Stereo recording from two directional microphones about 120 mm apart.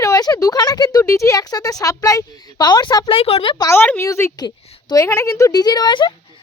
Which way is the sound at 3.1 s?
55° left (ahead or behind).